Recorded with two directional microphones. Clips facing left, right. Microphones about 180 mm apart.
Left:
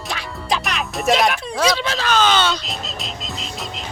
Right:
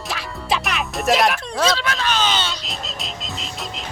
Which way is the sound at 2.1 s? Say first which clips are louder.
Left 8 dB; 50° left (ahead or behind).